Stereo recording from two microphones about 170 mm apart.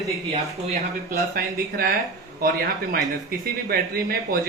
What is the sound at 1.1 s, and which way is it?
Speech, 60° right (ahead or behind).